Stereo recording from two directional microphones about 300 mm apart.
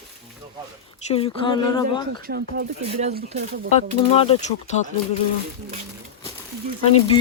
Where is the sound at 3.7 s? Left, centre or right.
Centre.